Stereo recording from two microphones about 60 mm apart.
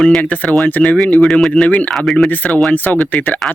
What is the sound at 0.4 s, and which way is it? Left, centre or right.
Speech, centre.